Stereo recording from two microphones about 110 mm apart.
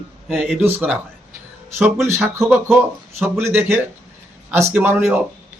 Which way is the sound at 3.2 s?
20° right (ahead or behind).